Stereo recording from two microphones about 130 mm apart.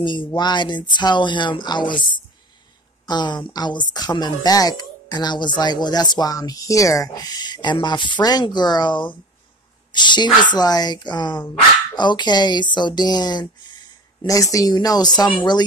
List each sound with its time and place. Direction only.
0.0 s speech: 40° left (ahead or behind)